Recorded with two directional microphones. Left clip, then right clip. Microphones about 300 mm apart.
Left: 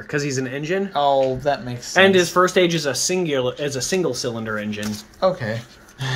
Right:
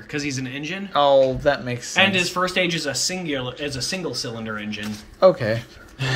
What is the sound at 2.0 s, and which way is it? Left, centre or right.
Speech, left.